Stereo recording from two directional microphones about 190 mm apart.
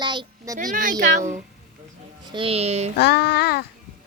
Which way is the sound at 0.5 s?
45° right (ahead or behind).